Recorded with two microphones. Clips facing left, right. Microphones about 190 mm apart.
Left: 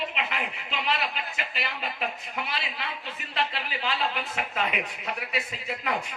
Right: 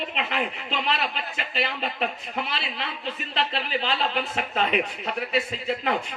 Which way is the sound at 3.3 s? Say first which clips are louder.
Right 3 dB; 30° right (ahead or behind).